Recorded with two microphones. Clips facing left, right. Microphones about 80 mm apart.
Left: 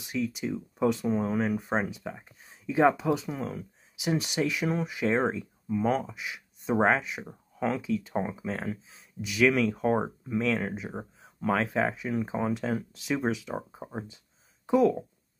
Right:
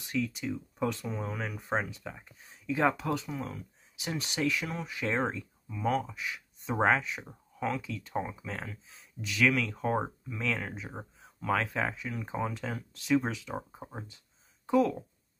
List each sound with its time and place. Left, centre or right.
0.0 s speech: centre
5.7 s speech: left